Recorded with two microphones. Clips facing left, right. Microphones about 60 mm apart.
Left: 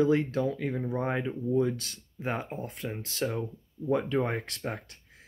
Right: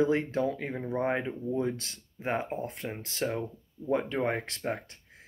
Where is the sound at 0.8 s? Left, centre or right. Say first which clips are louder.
Right 4 dB; centre.